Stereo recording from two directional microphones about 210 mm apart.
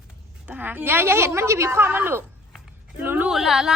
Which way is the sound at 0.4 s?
10° right (ahead or behind).